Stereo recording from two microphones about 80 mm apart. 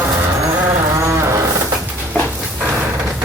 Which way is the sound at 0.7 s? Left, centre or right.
Right.